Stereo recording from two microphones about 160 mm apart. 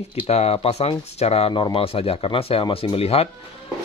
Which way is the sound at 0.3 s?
40° left (ahead or behind).